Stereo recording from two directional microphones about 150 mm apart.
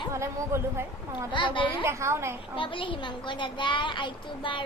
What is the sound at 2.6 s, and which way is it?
A woman's voice, 35° left (ahead or behind).